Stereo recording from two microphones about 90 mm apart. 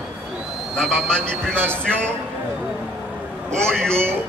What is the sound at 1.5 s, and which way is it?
Speech, 25° right (ahead or behind).